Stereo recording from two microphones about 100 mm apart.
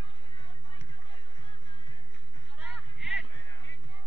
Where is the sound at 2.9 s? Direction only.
5° right (ahead or behind).